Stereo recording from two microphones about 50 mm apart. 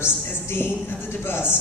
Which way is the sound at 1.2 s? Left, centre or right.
Left.